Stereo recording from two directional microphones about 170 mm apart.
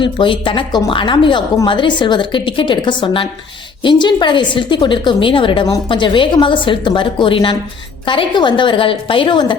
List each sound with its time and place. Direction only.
0.0 s a woman's voice: 30° left (ahead or behind)